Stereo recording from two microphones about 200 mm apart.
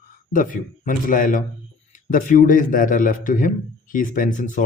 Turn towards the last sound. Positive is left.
turn(degrees=40)  # may be behind; listen again after turning